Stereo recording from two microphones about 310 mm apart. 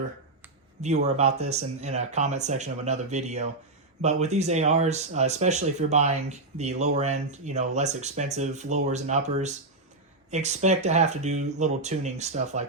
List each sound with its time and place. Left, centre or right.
0.8 s speech: right